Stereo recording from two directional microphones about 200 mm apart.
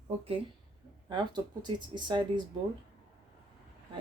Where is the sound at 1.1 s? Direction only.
20° right (ahead or behind).